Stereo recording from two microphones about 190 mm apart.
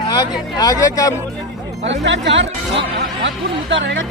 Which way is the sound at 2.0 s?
70° right (ahead or behind).